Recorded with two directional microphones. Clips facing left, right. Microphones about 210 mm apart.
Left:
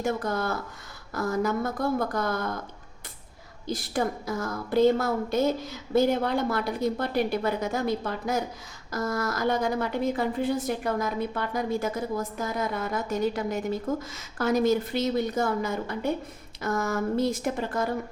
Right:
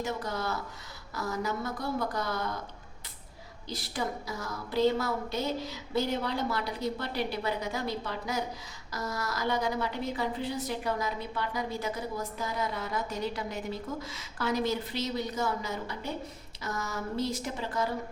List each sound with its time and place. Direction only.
0.0 s a woman's voice: 50° left (ahead or behind)
3.7 s a woman's voice: 50° left (ahead or behind)